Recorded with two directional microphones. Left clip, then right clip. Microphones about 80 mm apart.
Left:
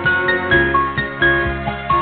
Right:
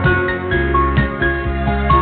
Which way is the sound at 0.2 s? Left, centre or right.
Right.